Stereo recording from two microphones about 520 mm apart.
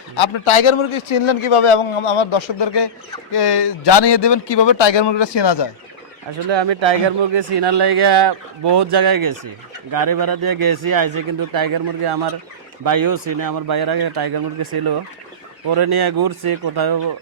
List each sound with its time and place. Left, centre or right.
0.2 s a man's voice: left
6.5 s a man's voice: right